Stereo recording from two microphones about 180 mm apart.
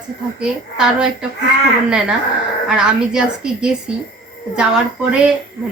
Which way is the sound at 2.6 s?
5° right (ahead or behind).